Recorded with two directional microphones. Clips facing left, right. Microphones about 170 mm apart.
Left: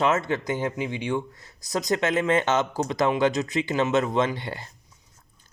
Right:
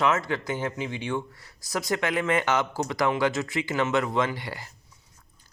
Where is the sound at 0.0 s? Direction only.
20° left (ahead or behind).